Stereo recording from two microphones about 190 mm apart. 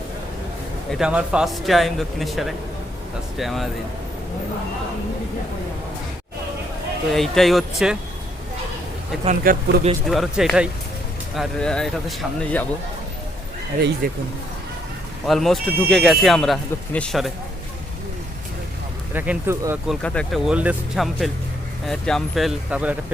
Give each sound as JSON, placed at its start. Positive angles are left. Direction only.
{"t": 0.9, "sound": "speech", "side_deg": -5}
{"t": 7.1, "sound": "speech", "side_deg": 0}
{"t": 9.2, "sound": "speech", "side_deg": -45}
{"t": 10.1, "sound": "speech", "side_deg": 0}
{"t": 14.0, "sound": "speech", "side_deg": -50}
{"t": 15.3, "sound": "speech", "side_deg": 0}
{"t": 19.1, "sound": "speech", "side_deg": -10}
{"t": 19.9, "sound": "speech", "side_deg": 5}